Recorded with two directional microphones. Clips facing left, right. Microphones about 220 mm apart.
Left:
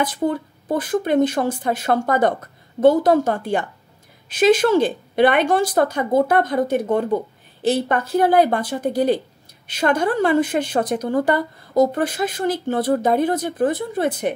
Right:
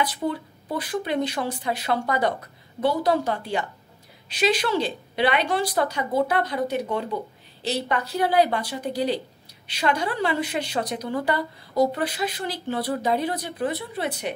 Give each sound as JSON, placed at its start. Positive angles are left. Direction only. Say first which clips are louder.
{"t": 0.0, "sound": "a woman's voice", "louder": "left 5 dB", "side_deg": 45}